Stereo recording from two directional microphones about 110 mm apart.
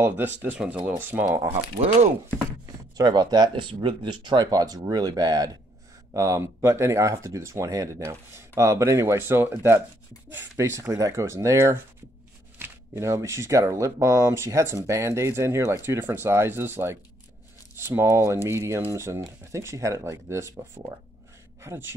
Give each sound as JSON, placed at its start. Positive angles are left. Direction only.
{"t": 0.0, "sound": "speech", "side_deg": -15}
{"t": 3.0, "sound": "speech", "side_deg": -40}
{"t": 21.5, "sound": "speech", "side_deg": -20}